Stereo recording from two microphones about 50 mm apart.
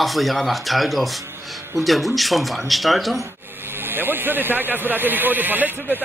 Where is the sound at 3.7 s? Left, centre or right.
Right.